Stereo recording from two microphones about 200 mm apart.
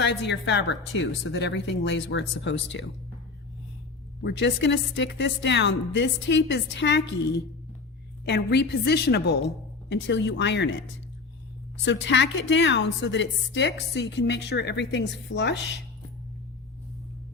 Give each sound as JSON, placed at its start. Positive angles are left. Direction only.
{"t": 0.0, "sound": "a woman's voice", "side_deg": 60}
{"t": 4.2, "sound": "a woman's voice", "side_deg": 60}
{"t": 11.9, "sound": "a woman's voice", "side_deg": 65}